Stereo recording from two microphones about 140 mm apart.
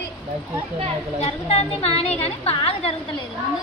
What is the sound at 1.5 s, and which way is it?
A woman's voice, 45° left (ahead or behind).